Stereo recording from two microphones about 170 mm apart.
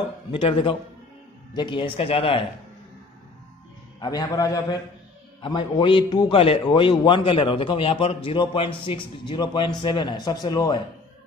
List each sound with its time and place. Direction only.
0.3 s speech: 30° left (ahead or behind)
4.0 s a man's voice: 25° left (ahead or behind)